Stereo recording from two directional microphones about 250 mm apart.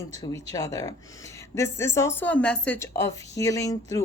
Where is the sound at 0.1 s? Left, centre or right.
Centre.